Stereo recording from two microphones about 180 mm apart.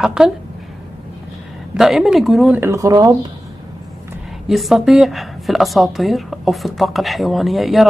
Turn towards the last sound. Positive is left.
turn(degrees=0)  # may be behind; listen again after turning